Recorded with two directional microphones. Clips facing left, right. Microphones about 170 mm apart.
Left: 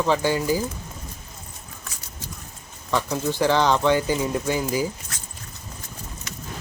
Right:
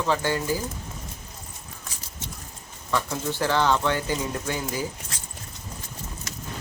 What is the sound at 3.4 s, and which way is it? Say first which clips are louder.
Speech: left 3 dB; 15° left (ahead or behind).